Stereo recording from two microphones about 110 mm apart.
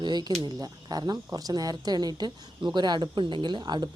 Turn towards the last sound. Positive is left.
turn(degrees=-40)  # may be behind; listen again after turning